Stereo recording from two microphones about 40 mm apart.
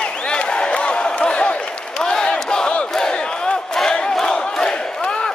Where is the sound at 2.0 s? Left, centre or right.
Left.